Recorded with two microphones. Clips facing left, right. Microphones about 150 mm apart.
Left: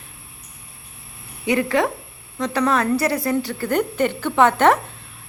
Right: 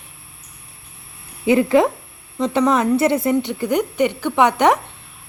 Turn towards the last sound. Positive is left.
turn(degrees=-15)  # may be behind; listen again after turning